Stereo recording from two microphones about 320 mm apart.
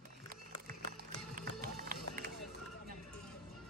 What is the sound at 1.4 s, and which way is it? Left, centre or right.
Music, right.